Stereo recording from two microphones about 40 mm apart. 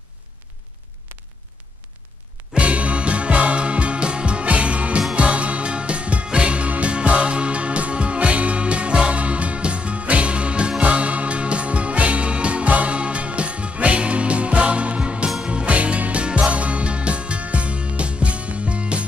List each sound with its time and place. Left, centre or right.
2.5 s music: right